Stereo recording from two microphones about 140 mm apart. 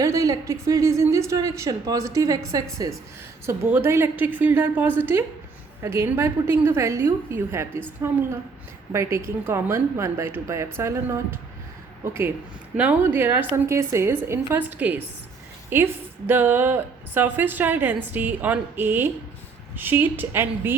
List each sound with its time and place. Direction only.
0.0 s a woman's voice: 25° right (ahead or behind)